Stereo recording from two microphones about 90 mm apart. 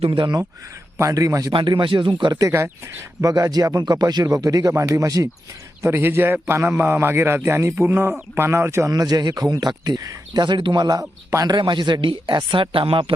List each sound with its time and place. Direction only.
0.0 s speech: 70° right (ahead or behind)
0.9 s a man's voice: 40° right (ahead or behind)
1.5 s speech: 65° right (ahead or behind)
2.4 s a man's voice: 30° right (ahead or behind)
3.2 s speech: 45° right (ahead or behind)
5.8 s a man's voice: 25° right (ahead or behind)
8.9 s speech: 45° right (ahead or behind)
11.0 s a man's voice: 30° right (ahead or behind)
11.4 s speech: 60° right (ahead or behind)